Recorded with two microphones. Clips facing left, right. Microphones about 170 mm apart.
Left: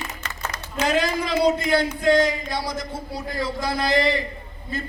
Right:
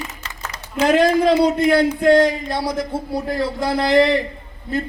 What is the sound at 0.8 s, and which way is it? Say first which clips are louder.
Speech: right 9 dB; 60° right (ahead or behind).